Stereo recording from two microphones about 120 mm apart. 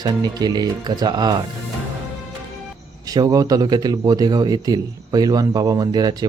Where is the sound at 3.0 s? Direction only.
30° right (ahead or behind).